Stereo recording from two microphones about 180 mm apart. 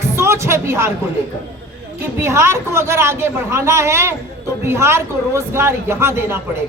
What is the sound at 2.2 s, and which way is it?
A man's voice, 15° right (ahead or behind).